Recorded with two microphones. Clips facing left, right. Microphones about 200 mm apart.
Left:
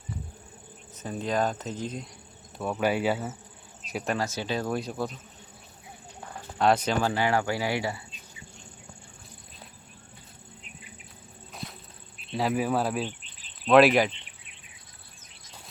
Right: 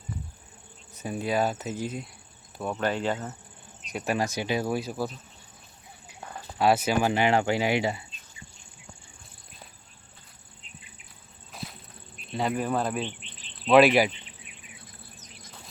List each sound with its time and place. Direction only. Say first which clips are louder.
0.9 s speech: right 1 dB; 10° right (ahead or behind)
2.6 s speech: left 2 dB; 5° left (ahead or behind)
4.1 s speech: right 2 dB; 15° right (ahead or behind)
6.6 s speech: right 1 dB; 5° right (ahead or behind)
11.5 s a sound: even; centre (ahead or behind)
12.2 s speech: left 1 dB; centre (ahead or behind)
13.1 s cricket: right 1 dB; 40° left (ahead or behind)
13.7 s speech: even; centre (ahead or behind)